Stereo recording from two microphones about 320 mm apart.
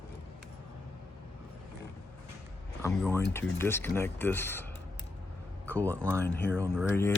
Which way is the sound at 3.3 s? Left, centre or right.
Centre.